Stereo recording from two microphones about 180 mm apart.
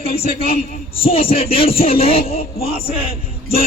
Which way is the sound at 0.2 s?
60° left (ahead or behind).